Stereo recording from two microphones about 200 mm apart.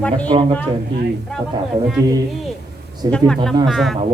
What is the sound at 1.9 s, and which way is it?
Speech, 20° right (ahead or behind).